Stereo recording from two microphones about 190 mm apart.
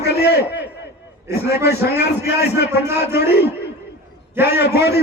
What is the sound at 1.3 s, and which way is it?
Speech, 15° right (ahead or behind).